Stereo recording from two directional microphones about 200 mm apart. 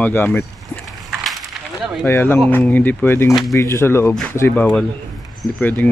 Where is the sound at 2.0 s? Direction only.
10° left (ahead or behind).